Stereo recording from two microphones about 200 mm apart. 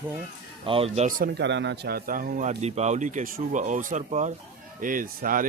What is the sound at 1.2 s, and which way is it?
A man's voice, 55° right (ahead or behind).